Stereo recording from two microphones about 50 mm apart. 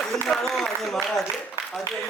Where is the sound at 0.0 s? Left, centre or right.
Centre.